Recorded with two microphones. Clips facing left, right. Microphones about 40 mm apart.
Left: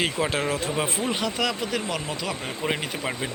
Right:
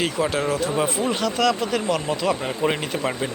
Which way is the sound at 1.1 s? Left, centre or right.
Centre.